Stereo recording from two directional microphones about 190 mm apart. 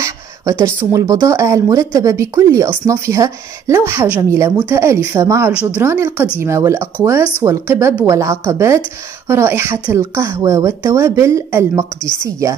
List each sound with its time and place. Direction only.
0.0 s speech: 15° right (ahead or behind)
12.0 s a woman's voice: 20° left (ahead or behind)